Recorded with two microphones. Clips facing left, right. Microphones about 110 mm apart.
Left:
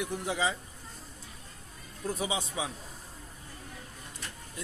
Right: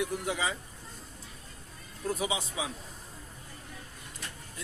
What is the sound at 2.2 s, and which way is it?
Speech, 30° left (ahead or behind).